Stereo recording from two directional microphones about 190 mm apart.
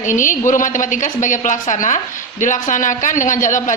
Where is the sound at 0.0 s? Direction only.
40° left (ahead or behind).